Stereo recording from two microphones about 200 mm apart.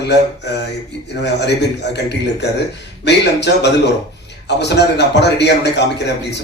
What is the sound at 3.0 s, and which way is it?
A man's voice, 60° left (ahead or behind).